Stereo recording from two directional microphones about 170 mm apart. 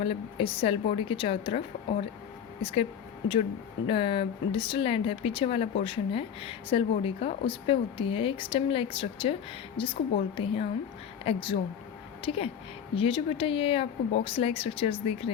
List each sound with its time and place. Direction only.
0.0 s speech: 35° left (ahead or behind)
3.8 s speech: 30° left (ahead or behind)